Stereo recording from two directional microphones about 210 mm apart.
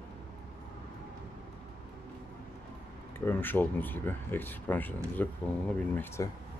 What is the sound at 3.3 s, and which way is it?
Speech, 10° left (ahead or behind).